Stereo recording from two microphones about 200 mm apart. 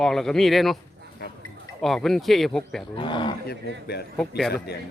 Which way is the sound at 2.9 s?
25° left (ahead or behind).